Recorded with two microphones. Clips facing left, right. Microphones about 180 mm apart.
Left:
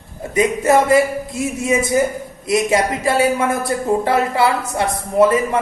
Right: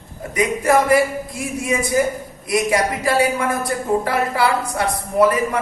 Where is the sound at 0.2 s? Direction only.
25° left (ahead or behind).